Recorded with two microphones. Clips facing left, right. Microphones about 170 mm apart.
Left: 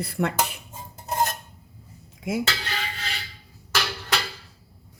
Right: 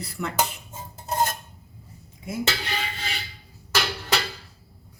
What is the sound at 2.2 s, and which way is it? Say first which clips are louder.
Music: left 5 dB; 80° left.